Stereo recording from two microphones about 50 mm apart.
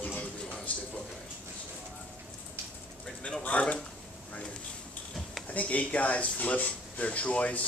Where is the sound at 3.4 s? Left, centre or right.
Left.